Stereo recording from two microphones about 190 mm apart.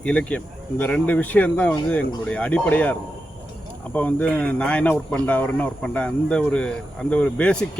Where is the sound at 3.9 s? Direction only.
5° left (ahead or behind).